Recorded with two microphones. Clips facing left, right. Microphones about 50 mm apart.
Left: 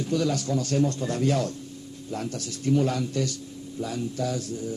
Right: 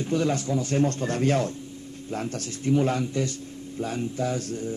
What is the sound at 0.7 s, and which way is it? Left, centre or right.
A man's voice, right.